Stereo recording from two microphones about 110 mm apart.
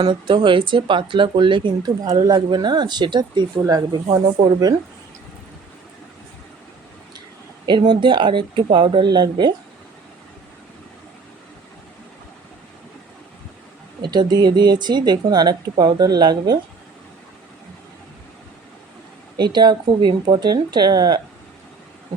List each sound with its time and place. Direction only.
0.0 s speech: 45° right (ahead or behind)
3.6 s speech: 35° right (ahead or behind)
7.7 s speech: 45° right (ahead or behind)
14.0 s speech: 40° right (ahead or behind)
19.4 s speech: 40° right (ahead or behind)